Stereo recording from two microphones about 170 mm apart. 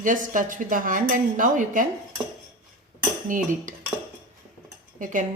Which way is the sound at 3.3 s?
50° right (ahead or behind).